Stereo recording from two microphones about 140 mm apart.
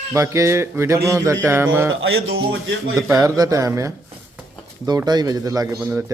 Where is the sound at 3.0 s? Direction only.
25° right (ahead or behind).